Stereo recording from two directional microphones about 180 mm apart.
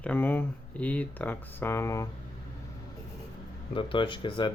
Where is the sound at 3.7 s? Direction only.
25° left (ahead or behind).